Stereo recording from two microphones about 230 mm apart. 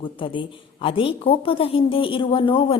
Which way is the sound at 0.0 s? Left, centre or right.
Left.